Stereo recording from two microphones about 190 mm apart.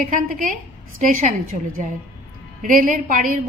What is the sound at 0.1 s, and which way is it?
A woman's voice, 45° right (ahead or behind).